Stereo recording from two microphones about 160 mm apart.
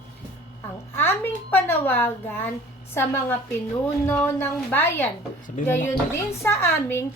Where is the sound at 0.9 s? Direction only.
15° left (ahead or behind).